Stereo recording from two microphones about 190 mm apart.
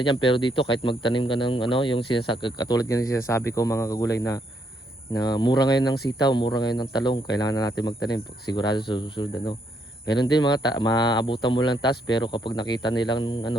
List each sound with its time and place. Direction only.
0.0 s speech: 25° left (ahead or behind)